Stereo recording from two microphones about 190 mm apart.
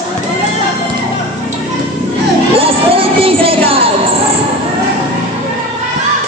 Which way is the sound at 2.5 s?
30° right (ahead or behind).